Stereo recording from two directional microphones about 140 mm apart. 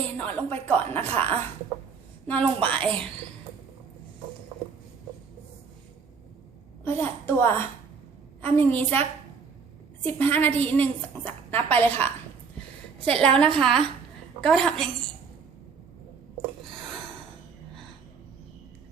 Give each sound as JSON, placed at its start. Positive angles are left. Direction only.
{"t": 0.2, "sound": "a woman's voice", "side_deg": 10}
{"t": 6.8, "sound": "a woman's voice", "side_deg": 15}
{"t": 10.1, "sound": "a woman's voice", "side_deg": 15}